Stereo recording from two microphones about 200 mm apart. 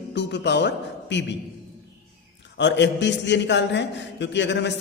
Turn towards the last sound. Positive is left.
turn(degrees=60)  # may be behind; listen again after turning